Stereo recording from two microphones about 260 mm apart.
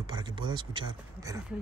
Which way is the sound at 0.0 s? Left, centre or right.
Centre.